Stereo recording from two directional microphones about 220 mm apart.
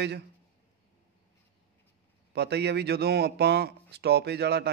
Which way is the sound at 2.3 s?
50° right (ahead or behind).